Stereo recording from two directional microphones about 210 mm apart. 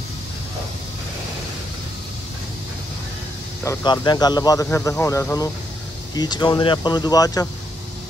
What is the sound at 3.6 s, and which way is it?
Speech, 20° left (ahead or behind).